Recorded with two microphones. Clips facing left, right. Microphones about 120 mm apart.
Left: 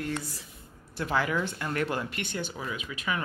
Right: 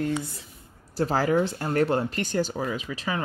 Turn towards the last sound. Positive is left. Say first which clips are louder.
# right 3 dB
turn(degrees=-35)  # may be behind; listen again after turning